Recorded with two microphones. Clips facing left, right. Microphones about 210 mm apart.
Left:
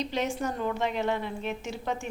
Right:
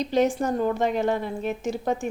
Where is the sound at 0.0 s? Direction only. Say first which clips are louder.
Right 7 dB; 40° right (ahead or behind).